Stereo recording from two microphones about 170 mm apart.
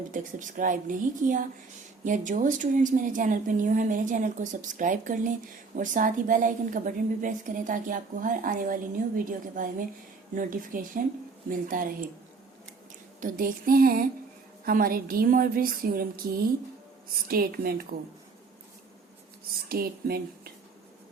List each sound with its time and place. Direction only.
0.1 s speech: 50° right (ahead or behind)
13.1 s a woman's voice: 55° right (ahead or behind)
19.6 s a woman's voice: 60° right (ahead or behind)